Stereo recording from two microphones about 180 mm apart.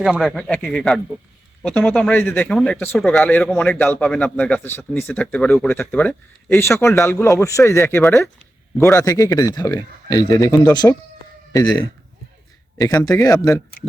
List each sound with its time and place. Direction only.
0.0 s a man's voice: 5° right (ahead or behind); by 10.8 s 20° left (ahead or behind)
12.8 s speech: 20° left (ahead or behind)